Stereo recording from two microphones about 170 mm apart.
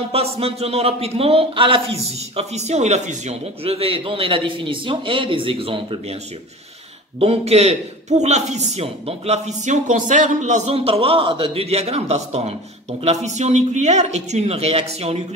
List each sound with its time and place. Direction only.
0.1 s a man's voice: 35° right (ahead or behind)
7.2 s a man's voice: 35° right (ahead or behind)